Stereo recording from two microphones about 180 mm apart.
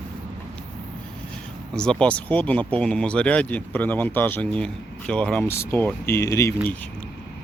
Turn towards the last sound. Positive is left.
turn(degrees=15)  # may be behind; listen again after turning